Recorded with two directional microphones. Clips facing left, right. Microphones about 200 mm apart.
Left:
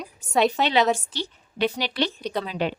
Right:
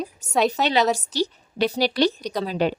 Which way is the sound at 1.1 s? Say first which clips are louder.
Right 5 dB; 40° right (ahead or behind).